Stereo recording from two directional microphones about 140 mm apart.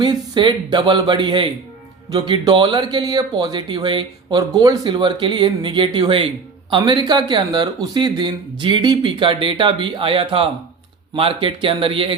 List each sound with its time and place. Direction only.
0.0 s speech: 30° right (ahead or behind)